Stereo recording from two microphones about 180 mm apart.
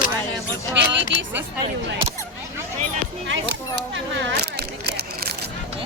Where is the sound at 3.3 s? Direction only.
85° right; by 5.3 s 65° right (ahead or behind).